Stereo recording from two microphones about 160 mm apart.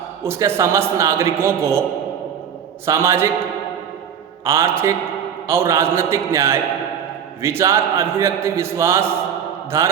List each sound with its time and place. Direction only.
0.2 s a man's voice: 15° right (ahead or behind)
2.8 s a man's voice: 15° right (ahead or behind)
4.4 s a man's voice: 15° right (ahead or behind)